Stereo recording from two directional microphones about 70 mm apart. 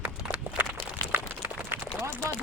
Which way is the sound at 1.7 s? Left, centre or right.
Right.